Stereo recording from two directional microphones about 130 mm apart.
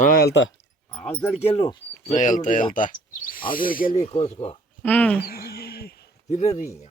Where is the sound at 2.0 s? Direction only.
70° left (ahead or behind).